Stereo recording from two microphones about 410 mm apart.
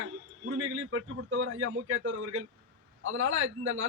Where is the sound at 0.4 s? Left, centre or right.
Right.